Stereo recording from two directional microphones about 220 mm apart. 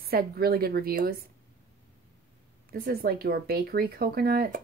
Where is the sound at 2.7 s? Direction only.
45° right (ahead or behind).